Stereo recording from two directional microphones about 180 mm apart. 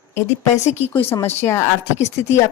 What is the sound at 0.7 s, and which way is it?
Speech, 35° left (ahead or behind).